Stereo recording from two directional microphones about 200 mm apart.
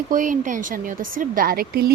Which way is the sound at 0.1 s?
40° right (ahead or behind).